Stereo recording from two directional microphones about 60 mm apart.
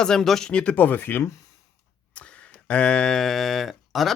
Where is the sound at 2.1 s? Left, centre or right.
Left.